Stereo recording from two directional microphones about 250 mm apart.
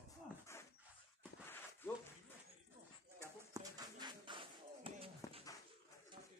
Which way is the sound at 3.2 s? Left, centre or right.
Centre.